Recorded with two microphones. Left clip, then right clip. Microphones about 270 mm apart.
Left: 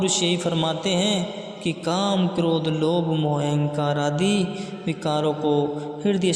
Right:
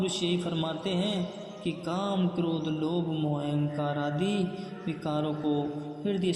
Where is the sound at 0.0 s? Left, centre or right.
Left.